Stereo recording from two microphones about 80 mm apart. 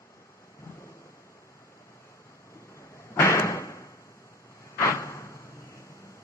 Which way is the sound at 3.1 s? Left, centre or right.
Left.